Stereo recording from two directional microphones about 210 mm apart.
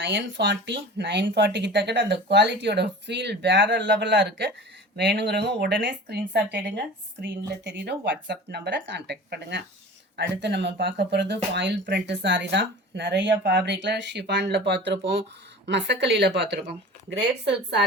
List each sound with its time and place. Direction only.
0.0 s speech: 55° right (ahead or behind)